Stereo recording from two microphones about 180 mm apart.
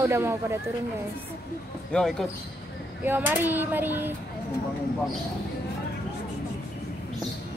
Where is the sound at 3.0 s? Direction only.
10° right (ahead or behind).